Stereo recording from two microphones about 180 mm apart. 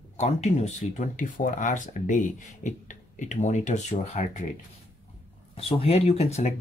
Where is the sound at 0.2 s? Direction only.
40° left (ahead or behind).